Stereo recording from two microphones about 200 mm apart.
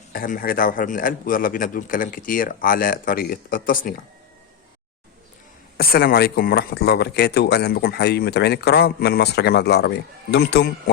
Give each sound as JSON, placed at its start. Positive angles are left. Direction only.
{"t": 0.1, "sound": "speech", "side_deg": 45}
{"t": 5.7, "sound": "speech", "side_deg": 50}